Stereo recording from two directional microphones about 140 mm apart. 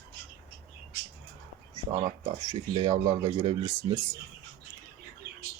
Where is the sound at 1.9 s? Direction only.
65° right (ahead or behind).